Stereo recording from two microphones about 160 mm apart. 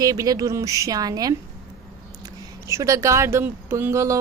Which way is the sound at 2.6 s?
20° right (ahead or behind).